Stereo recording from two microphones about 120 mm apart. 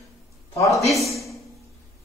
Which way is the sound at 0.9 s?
Centre (ahead or behind).